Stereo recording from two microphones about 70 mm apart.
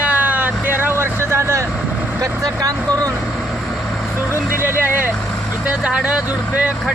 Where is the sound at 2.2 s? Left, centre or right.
Right.